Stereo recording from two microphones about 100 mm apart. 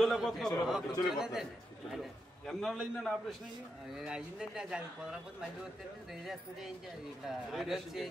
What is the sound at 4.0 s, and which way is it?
A man's voice, 10° right (ahead or behind).